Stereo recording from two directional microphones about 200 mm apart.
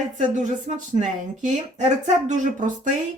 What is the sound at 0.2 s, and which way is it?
A woman's voice, 35° right (ahead or behind).